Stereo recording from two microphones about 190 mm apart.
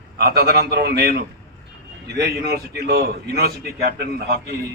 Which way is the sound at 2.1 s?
60° right (ahead or behind).